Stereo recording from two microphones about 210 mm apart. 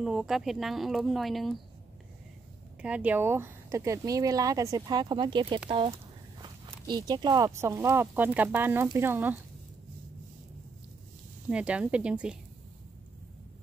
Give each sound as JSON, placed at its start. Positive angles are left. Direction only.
{"t": 0.0, "sound": "speech", "side_deg": 0}
{"t": 2.8, "sound": "speech", "side_deg": -5}
{"t": 11.4, "sound": "speech", "side_deg": -5}